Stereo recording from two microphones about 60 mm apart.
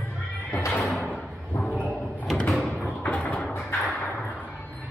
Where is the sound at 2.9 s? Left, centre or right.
Left.